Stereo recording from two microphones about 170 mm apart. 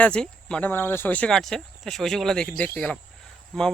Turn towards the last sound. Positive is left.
turn(degrees=5)  # may be behind; listen again after turning